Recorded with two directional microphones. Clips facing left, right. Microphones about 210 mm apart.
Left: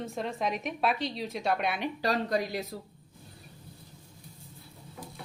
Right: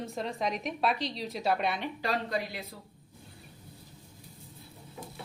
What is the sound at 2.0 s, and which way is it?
Speech, 40° left (ahead or behind).